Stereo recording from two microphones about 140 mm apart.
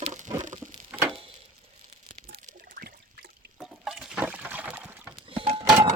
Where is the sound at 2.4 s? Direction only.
70° right (ahead or behind).